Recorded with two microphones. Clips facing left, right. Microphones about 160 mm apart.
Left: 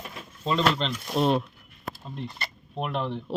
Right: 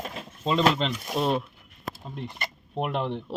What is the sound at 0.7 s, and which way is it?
Speech, centre (ahead or behind).